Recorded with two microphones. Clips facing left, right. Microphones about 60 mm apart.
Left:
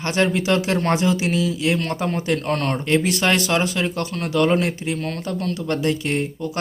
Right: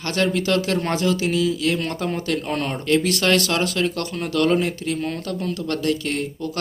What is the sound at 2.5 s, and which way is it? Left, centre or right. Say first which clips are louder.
Speech: left 2 dB; centre.